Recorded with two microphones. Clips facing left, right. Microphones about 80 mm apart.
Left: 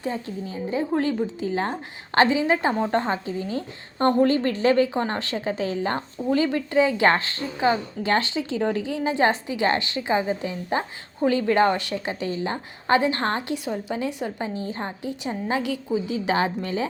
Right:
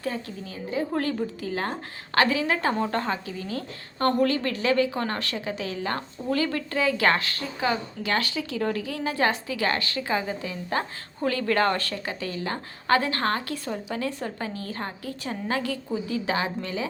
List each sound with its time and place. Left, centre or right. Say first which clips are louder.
0.0 s a woman's voice: left 3 dB; left